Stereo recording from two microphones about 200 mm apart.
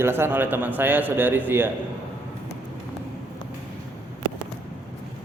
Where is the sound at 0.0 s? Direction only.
10° right (ahead or behind).